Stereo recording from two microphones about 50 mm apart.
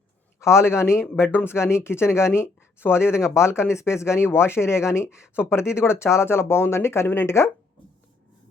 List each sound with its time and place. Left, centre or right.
0.3 s a man's voice: left
1.1 s speech: left
5.3 s speech: left